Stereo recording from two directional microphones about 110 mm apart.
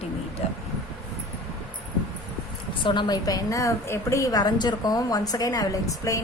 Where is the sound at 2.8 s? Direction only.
45° left (ahead or behind).